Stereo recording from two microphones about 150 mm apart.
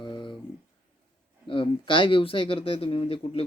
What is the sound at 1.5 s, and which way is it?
Speech, 35° left (ahead or behind).